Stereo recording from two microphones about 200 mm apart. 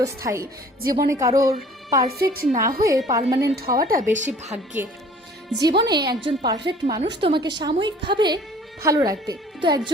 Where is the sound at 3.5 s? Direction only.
50° right (ahead or behind).